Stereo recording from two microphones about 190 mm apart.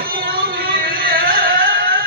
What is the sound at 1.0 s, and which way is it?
Carnatic music, 50° right (ahead or behind).